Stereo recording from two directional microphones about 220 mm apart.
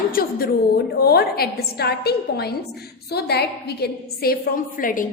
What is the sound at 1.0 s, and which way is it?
A woman's voice, 45° left (ahead or behind).